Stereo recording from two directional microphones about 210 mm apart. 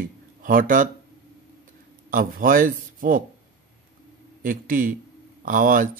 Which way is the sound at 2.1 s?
40° right (ahead or behind).